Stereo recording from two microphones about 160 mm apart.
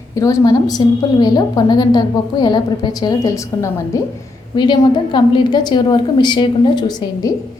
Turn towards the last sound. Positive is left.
turn(degrees=25)  # may be behind; listen again after turning